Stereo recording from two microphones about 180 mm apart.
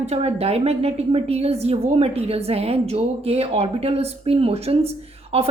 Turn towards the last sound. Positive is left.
turn(degrees=-35)  # may be behind; listen again after turning